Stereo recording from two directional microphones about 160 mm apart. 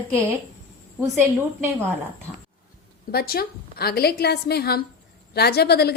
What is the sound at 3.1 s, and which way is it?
A woman's voice, 70° left (ahead or behind).